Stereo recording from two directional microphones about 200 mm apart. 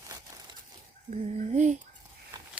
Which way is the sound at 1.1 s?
35° right (ahead or behind).